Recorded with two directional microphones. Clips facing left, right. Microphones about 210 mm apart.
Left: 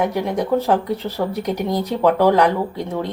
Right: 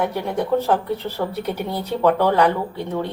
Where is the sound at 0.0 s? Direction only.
15° left (ahead or behind).